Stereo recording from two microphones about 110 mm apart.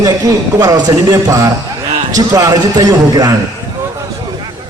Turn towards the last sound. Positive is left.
turn(degrees=-35)  # may be behind; listen again after turning